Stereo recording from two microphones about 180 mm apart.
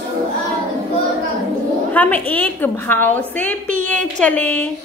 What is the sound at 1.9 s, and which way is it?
A woman's voice, 10° left (ahead or behind).